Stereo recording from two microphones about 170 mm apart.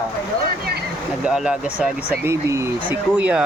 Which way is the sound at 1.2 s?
5° right (ahead or behind).